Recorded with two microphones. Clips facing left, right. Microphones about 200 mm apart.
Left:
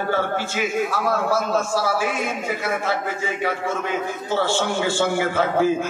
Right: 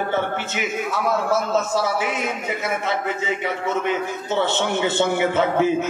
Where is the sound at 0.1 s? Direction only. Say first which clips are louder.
Left 1 dB; 20° right (ahead or behind).